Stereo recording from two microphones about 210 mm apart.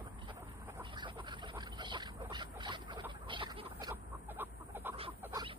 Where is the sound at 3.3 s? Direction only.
25° right (ahead or behind).